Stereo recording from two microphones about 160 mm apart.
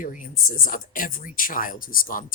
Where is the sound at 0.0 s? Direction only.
55° left (ahead or behind).